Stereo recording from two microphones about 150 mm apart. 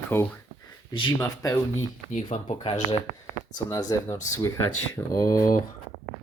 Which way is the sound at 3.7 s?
25° left (ahead or behind).